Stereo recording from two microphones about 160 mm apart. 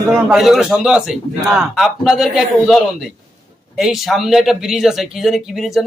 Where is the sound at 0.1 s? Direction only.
Centre (ahead or behind).